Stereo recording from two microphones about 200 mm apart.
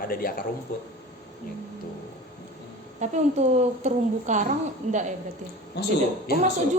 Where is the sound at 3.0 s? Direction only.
35° right (ahead or behind).